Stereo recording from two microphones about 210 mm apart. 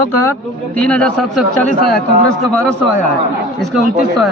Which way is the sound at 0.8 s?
5° left (ahead or behind).